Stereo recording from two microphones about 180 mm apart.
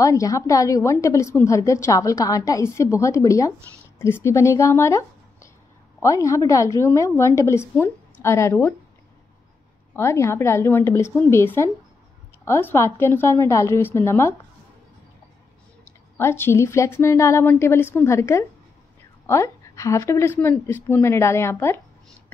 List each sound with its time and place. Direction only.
0.0 s a woman's voice: 20° left (ahead or behind)
9.9 s a woman's voice: 15° left (ahead or behind)
15.8 s a woman's voice: 15° left (ahead or behind)